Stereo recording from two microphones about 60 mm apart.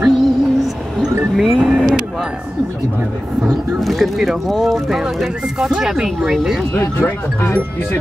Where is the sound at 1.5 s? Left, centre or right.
Centre.